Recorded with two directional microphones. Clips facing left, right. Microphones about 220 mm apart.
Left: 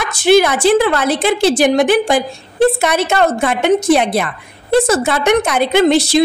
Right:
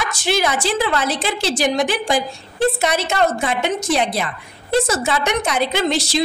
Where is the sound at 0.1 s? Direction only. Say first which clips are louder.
Left 12 dB; 55° left (ahead or behind).